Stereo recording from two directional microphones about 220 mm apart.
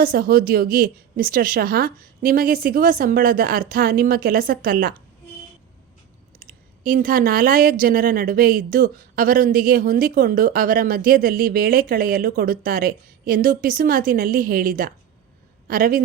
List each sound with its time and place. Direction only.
0.0 s speech: 40° right (ahead or behind)
6.4 s speech: 40° right (ahead or behind)